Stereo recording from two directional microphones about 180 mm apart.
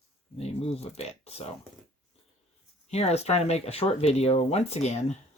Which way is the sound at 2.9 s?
35° left (ahead or behind).